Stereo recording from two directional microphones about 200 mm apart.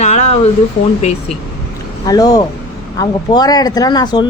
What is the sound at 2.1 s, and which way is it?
Speech, 20° left (ahead or behind).